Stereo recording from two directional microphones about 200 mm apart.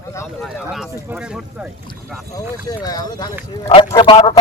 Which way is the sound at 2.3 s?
20° left (ahead or behind).